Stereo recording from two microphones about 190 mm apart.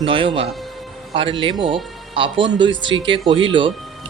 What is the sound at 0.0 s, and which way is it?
Speech, 30° right (ahead or behind).